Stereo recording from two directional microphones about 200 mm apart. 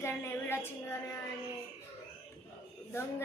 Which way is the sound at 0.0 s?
10° left (ahead or behind).